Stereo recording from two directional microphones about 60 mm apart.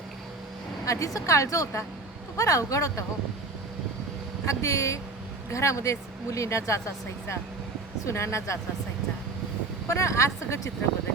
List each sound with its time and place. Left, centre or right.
0.9 s speech: left
4.4 s speech: left
8.0 s speech: left
9.9 s speech: left